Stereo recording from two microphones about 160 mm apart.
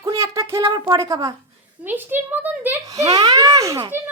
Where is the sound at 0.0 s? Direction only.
20° right (ahead or behind).